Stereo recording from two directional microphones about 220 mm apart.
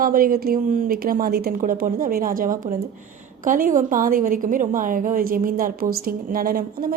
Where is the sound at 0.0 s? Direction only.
40° right (ahead or behind).